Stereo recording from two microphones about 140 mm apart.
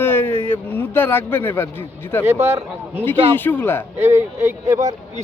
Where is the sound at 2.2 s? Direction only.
20° right (ahead or behind).